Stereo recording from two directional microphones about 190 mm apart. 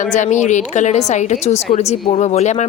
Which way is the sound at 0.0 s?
40° left (ahead or behind).